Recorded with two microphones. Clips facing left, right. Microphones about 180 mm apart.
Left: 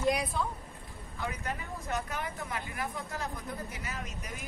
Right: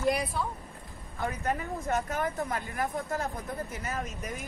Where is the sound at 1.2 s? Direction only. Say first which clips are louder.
Right 6 dB; 55° right (ahead or behind).